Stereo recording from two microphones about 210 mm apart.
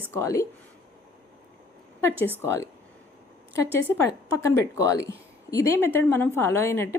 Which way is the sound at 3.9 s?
15° left (ahead or behind).